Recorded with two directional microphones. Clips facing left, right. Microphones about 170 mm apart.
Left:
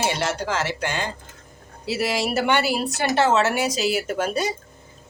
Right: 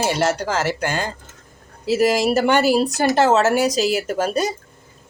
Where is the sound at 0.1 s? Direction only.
40° right (ahead or behind).